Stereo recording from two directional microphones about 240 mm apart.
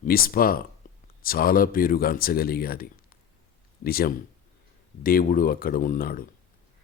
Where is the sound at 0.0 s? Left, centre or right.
Left.